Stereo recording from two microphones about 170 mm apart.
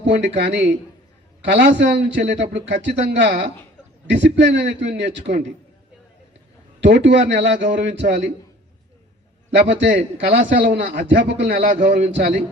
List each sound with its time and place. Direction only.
0.2 s a man's voice: 90° right
6.7 s a man's voice: 90° right
9.5 s a man's voice: 90° right
10.3 s a man's voice: 75° right (ahead or behind); by 11.3 s 55° right (ahead or behind)
11.3 s a man's voice: 80° right
11.8 s a man's voice: 55° right (ahead or behind)
12.0 s a man's voice: 90° right